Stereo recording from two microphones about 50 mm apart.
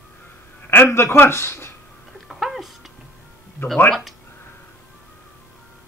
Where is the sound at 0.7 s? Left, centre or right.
Left.